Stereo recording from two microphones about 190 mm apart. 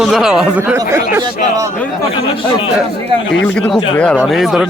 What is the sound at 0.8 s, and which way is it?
Speech, 15° right (ahead or behind).